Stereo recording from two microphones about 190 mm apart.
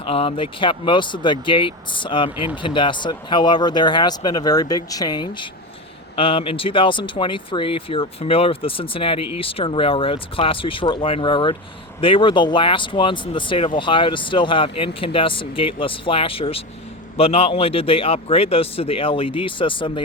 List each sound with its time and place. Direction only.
0.0 s speech: 30° left (ahead or behind)